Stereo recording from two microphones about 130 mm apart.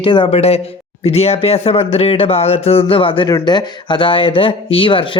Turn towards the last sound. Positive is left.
turn(degrees=40)  # may be behind; listen again after turning